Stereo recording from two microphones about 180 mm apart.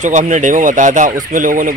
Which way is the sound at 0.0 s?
45° right (ahead or behind).